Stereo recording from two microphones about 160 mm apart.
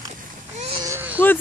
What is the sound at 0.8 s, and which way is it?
Baby cry, 10° right (ahead or behind).